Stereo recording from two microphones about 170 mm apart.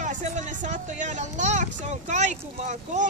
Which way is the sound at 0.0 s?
45° right (ahead or behind).